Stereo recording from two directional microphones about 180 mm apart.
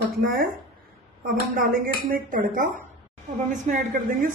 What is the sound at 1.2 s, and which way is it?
Speech, 50° right (ahead or behind).